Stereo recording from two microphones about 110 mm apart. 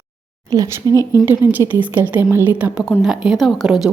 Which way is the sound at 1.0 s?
30° left (ahead or behind).